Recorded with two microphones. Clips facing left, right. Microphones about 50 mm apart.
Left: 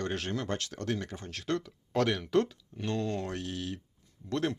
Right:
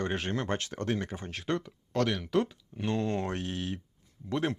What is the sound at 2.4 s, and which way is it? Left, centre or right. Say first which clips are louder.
Speech: right 2 dB; centre.